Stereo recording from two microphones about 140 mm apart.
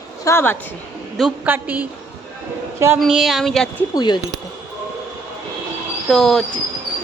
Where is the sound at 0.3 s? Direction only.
20° left (ahead or behind).